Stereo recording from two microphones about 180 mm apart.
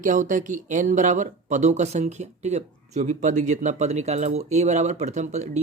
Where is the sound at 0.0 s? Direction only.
45° right (ahead or behind).